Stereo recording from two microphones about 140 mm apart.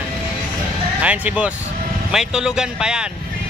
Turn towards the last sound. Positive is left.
turn(degrees=-5)  # may be behind; listen again after turning